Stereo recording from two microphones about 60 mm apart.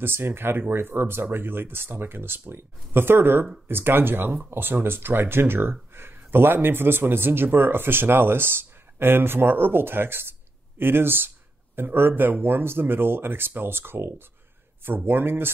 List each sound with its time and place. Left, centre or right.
0.0 s speech: right